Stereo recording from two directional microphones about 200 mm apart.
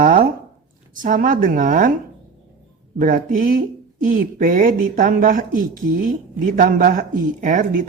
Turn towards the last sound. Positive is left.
turn(degrees=-40)  # may be behind; listen again after turning